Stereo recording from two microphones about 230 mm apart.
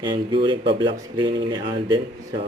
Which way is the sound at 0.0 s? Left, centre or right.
Centre.